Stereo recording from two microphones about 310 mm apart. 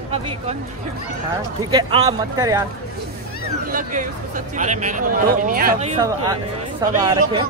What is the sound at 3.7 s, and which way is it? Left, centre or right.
Speech, right.